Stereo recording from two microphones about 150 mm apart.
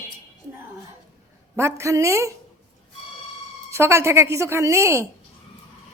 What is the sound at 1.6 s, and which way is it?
Speech, 20° right (ahead or behind).